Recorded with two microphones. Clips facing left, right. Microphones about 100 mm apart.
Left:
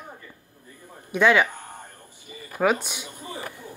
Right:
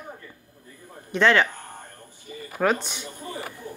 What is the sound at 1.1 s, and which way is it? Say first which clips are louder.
Speech: left 1 dB; 10° left (ahead or behind).